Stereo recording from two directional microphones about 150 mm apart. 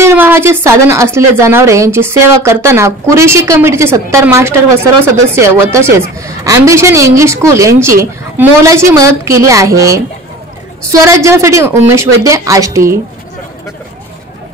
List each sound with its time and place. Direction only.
0.0 s a woman's voice: 15° right (ahead or behind)